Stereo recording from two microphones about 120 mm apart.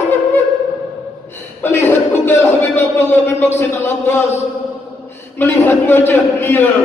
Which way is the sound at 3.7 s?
25° left (ahead or behind).